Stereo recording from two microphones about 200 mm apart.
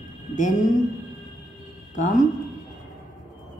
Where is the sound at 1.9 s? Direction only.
40° left (ahead or behind).